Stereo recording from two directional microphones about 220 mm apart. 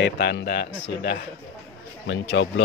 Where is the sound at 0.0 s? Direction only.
50° left (ahead or behind).